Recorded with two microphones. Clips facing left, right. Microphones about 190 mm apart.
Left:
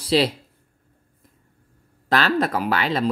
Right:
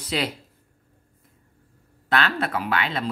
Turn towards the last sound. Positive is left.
turn(degrees=40)  # may be behind; listen again after turning